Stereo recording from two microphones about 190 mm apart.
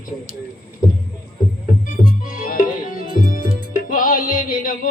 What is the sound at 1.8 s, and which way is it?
Music, 45° left (ahead or behind).